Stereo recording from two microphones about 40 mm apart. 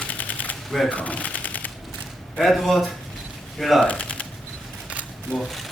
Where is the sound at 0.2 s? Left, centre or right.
Left.